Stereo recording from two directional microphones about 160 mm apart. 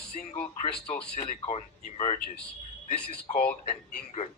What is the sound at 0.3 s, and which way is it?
Speech, 35° left (ahead or behind).